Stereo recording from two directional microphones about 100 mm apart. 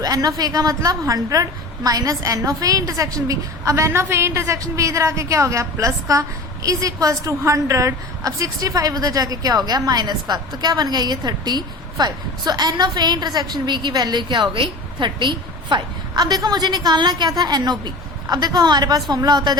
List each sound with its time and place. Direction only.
0.0 s a woman's voice: 40° right (ahead or behind)